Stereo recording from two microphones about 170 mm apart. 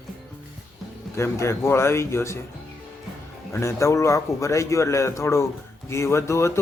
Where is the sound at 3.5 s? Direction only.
15° left (ahead or behind).